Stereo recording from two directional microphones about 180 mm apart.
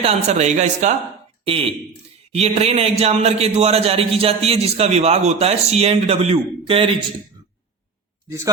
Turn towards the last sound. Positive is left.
turn(degrees=-30)  # may be behind; listen again after turning